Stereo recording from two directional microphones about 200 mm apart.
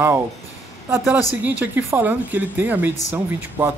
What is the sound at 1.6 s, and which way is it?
Speech, 10° right (ahead or behind).